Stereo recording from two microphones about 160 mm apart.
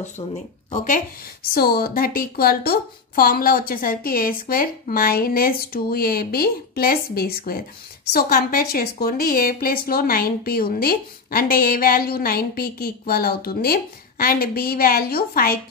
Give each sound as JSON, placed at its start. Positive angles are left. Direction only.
{"t": 0.7, "sound": "speech", "side_deg": 55}
{"t": 1.5, "sound": "a woman's voice", "side_deg": 75}